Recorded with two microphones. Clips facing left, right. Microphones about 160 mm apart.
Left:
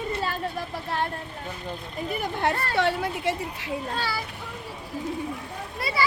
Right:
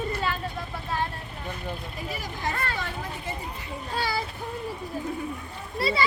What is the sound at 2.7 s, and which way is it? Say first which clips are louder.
Speech: left 9 dB; 75° left (ahead or behind).